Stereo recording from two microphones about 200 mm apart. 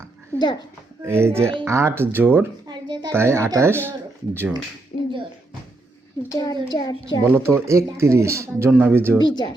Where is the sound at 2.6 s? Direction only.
20° right (ahead or behind).